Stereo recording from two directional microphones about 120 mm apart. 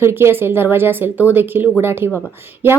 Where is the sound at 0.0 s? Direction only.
20° right (ahead or behind).